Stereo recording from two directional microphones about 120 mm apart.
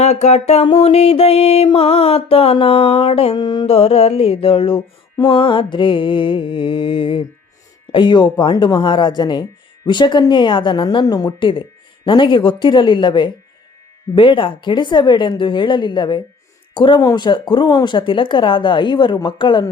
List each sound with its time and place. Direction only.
0.0 s mantra: 65° left (ahead or behind)
3.3 s speech: 35° left (ahead or behind)
3.7 s mantra: 55° left (ahead or behind)
7.9 s speech: 40° left (ahead or behind)